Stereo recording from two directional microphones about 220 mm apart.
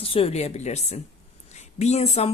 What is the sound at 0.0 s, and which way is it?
Speech, 25° left (ahead or behind).